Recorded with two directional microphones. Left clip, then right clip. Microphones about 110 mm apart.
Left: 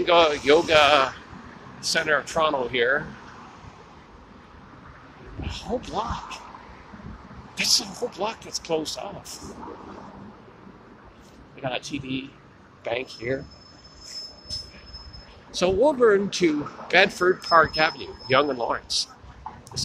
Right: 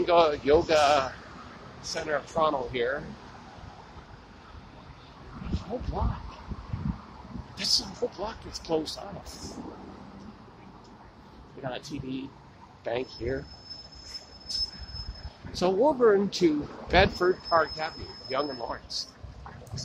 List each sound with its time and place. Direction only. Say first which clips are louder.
0.0 s speech: left 4 dB; 20° right (ahead or behind)
1.8 s speech: left 8 dB; 20° left (ahead or behind)
7.5 s speech: left 5 dB; 5° right (ahead or behind)
8.2 s speech: left 7 dB; 15° right (ahead or behind)
11.6 s speech: left 6 dB; 25° right (ahead or behind)
15.5 s speech: left 4 dB; 20° right (ahead or behind)
17.2 s speech: left 6 dB; centre (ahead or behind)
17.7 s speech: left 11 dB; 25° left (ahead or behind)